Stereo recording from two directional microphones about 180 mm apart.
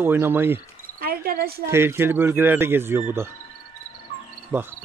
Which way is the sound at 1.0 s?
55° right (ahead or behind).